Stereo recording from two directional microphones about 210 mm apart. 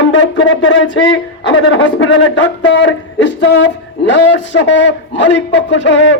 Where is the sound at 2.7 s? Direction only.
60° left (ahead or behind).